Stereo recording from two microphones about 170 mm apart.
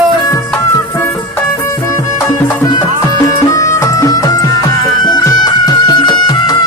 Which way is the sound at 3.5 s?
20° left (ahead or behind).